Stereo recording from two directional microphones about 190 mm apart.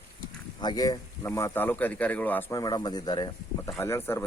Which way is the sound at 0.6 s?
20° left (ahead or behind).